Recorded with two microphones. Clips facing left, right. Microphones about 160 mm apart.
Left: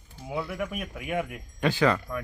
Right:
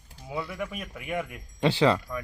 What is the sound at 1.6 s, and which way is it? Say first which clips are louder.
Speech: right 1 dB; 25° right (ahead or behind).